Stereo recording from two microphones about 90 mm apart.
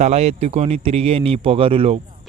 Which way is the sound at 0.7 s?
90° right.